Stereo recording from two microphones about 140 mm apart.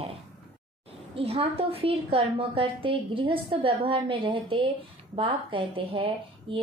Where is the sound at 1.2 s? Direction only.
45° right (ahead or behind).